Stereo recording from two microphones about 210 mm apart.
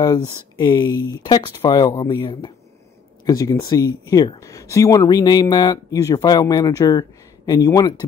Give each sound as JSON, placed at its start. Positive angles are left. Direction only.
{"t": 0.0, "sound": "speech", "side_deg": 20}